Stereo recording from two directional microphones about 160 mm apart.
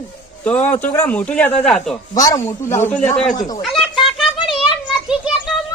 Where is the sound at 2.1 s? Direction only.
20° left (ahead or behind).